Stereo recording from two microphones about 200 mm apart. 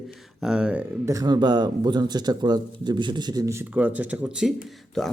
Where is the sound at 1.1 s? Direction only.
20° right (ahead or behind).